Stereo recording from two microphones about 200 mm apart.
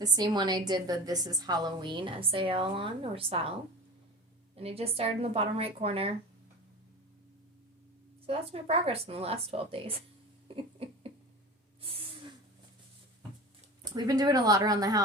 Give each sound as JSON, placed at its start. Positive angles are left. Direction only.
{"t": 0.0, "sound": "a woman's voice", "side_deg": -20}
{"t": 4.5, "sound": "a woman's voice", "side_deg": -30}
{"t": 8.3, "sound": "a woman's voice", "side_deg": -30}
{"t": 10.5, "sound": "a sound", "side_deg": -30}
{"t": 11.8, "sound": "spray", "side_deg": -30}
{"t": 13.8, "sound": "a woman's voice", "side_deg": -20}